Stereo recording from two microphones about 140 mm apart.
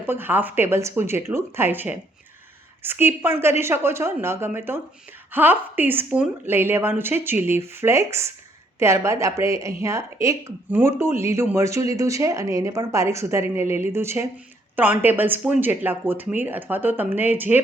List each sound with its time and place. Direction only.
0.0 s a woman's voice: 15° right (ahead or behind)